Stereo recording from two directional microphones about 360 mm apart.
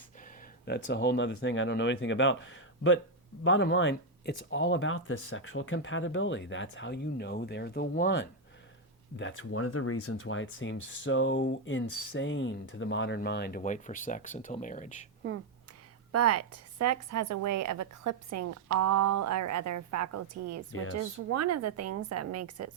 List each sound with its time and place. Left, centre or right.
0.9 s speech: left
15.2 s speech: right
16.1 s a woman's voice: right